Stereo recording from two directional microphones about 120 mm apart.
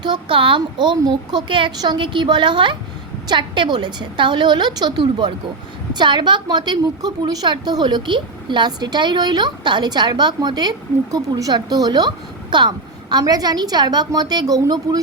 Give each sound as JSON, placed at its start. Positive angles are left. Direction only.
{"t": 0.0, "sound": "a woman's voice", "side_deg": -40}